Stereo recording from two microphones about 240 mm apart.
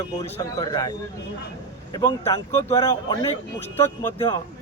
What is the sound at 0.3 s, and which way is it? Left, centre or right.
Speech, centre.